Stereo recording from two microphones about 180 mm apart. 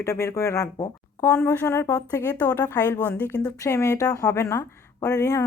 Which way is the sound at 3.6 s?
15° left (ahead or behind).